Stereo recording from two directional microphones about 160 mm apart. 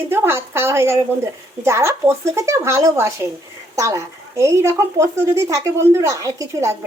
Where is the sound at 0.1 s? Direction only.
15° right (ahead or behind).